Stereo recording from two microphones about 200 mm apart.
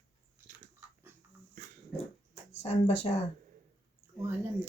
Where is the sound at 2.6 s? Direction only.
30° left (ahead or behind).